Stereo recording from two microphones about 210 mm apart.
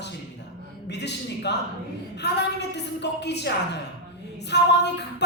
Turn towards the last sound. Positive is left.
turn(degrees=55)  # may be behind; listen again after turning